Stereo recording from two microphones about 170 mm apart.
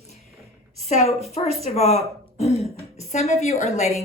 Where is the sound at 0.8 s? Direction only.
40° left (ahead or behind).